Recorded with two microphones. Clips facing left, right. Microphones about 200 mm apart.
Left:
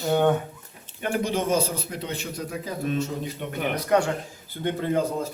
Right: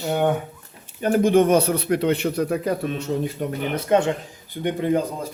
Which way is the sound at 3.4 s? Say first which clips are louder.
Right 7 dB; 40° right (ahead or behind).